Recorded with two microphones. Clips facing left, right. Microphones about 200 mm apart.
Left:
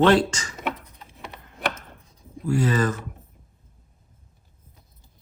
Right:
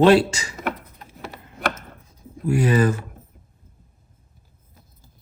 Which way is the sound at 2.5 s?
15° right (ahead or behind).